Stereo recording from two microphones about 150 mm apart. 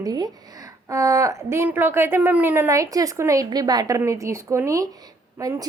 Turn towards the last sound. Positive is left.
turn(degrees=-25)  # may be behind; listen again after turning